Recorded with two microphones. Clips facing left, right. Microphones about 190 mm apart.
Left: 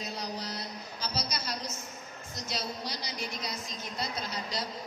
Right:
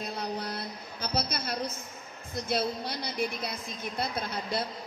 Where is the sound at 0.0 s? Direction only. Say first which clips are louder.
Right 3 dB; 55° right (ahead or behind).